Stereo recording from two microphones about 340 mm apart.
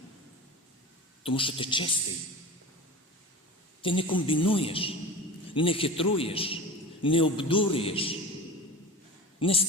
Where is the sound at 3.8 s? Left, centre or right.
Centre.